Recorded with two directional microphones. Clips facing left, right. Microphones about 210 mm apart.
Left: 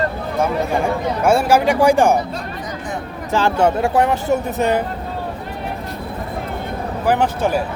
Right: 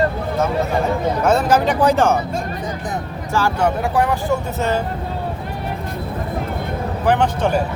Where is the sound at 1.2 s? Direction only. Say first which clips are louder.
Left 2 dB; 10° left (ahead or behind).